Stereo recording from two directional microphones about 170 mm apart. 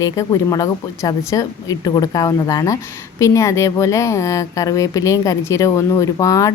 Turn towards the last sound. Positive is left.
turn(degrees=20)  # may be behind; listen again after turning